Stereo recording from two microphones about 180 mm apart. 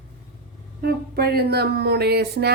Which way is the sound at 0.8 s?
60° right (ahead or behind).